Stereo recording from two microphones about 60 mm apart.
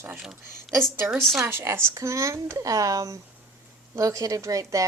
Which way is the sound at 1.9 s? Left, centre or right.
Right.